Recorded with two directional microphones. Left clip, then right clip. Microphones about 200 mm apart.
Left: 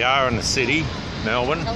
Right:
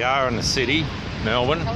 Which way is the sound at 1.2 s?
15° right (ahead or behind).